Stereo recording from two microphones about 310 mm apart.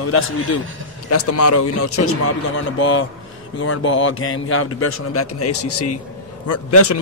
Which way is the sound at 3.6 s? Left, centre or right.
Left.